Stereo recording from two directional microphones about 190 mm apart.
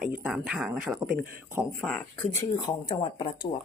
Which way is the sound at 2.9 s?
25° left (ahead or behind).